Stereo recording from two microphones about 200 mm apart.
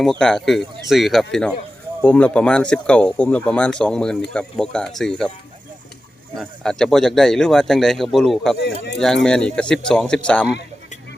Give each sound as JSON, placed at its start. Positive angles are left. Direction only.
{"t": 0.0, "sound": "speech", "side_deg": 5}
{"t": 6.3, "sound": "speech", "side_deg": 5}
{"t": 8.6, "sound": "speech", "side_deg": 55}
{"t": 9.0, "sound": "speech", "side_deg": 0}